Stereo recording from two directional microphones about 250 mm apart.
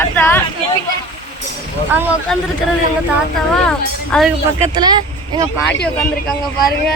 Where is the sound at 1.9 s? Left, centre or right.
Centre.